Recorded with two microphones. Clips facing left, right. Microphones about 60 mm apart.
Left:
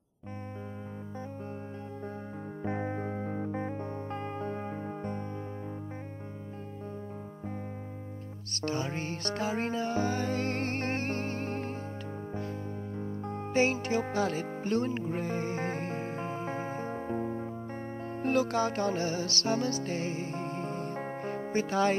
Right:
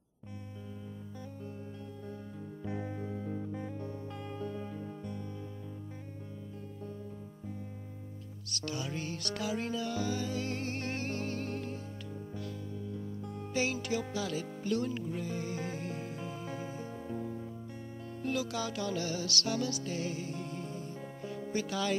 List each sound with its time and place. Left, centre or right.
2.6 s music: left
8.5 s music: left